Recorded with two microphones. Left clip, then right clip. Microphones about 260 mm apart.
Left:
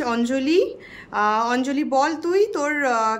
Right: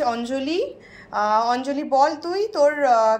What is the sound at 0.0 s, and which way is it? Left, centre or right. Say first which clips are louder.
Speech: even; centre.